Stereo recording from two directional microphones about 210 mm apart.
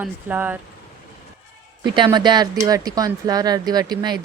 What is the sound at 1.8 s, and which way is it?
Speech, 20° right (ahead or behind).